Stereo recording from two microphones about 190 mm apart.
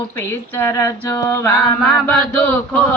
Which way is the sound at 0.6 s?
15° left (ahead or behind).